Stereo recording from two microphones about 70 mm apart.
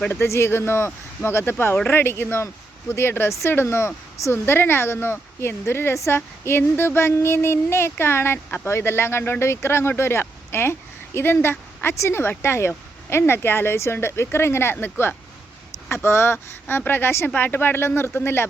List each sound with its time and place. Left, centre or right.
0.1 s speech: left